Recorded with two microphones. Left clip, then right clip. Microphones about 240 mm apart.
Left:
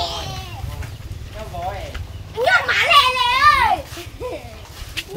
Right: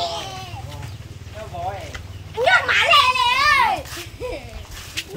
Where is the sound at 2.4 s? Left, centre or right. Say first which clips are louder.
Even; centre.